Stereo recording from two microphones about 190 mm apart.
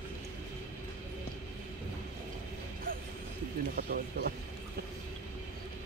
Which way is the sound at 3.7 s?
55° right (ahead or behind).